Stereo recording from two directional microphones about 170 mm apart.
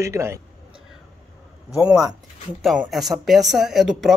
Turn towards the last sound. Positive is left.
turn(degrees=0)  # may be behind; listen again after turning